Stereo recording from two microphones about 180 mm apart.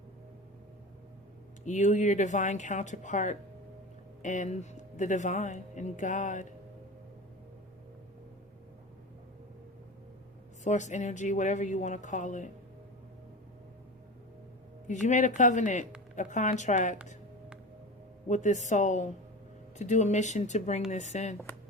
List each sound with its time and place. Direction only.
1.6 s speech: 40° left (ahead or behind)
10.6 s speech: 40° left (ahead or behind)
15.0 s speech: 40° left (ahead or behind)
18.3 s speech: 40° left (ahead or behind)